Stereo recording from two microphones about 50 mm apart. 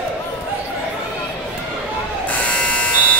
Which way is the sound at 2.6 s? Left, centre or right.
Left.